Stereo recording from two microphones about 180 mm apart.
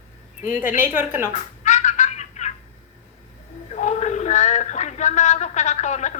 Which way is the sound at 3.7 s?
40° left (ahead or behind).